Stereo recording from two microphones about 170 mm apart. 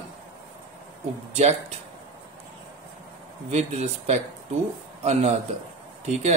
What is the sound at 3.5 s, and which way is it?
Speech, 40° right (ahead or behind).